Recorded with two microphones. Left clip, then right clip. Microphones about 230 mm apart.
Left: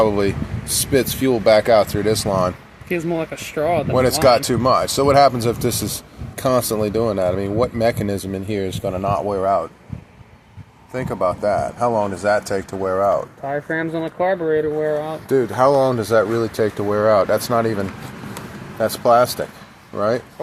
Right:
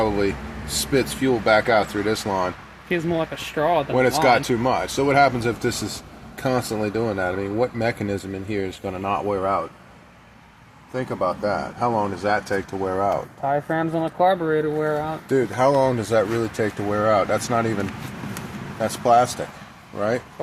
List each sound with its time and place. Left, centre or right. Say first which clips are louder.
0.0 s speech: left 4 dB; left
2.9 s speech: left 1 dB; centre
3.9 s speech: left 5 dB; left
10.9 s speech: left 3 dB; left
13.5 s speech: even; centre
15.3 s speech: left 4 dB; left